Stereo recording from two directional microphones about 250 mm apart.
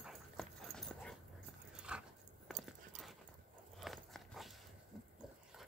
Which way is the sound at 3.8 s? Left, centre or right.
Centre.